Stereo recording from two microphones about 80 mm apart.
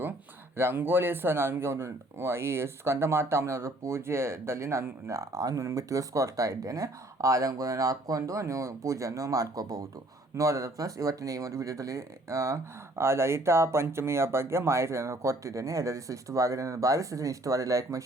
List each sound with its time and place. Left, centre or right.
0.5 s speech: right
10.3 s speech: right